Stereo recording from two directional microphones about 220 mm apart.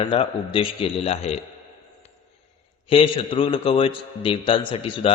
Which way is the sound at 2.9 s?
25° left (ahead or behind).